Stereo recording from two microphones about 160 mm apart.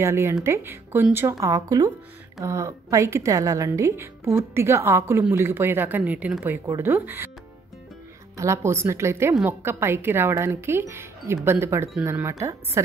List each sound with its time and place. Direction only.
0.0 s a woman's voice: 15° right (ahead or behind)
8.4 s a woman's voice: 15° right (ahead or behind)